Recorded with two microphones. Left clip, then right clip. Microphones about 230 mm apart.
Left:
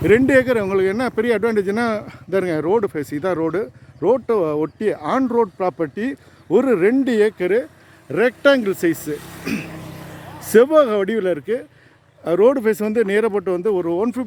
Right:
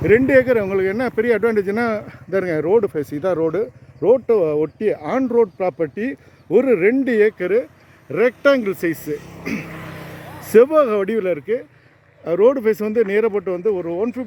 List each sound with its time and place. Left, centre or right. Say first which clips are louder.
0.0 s speech: right 1 dB; centre
9.1 s speech: right 1 dB; left
9.4 s vehicle: left 1 dB; centre
9.7 s a sound: right 2 dB; centre
10.5 s speech: even; centre